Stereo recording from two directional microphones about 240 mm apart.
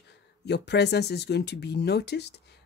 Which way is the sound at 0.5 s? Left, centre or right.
Left.